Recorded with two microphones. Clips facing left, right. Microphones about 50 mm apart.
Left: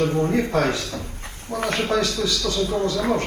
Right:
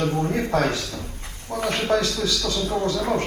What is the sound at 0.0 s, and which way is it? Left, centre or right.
Speech, left.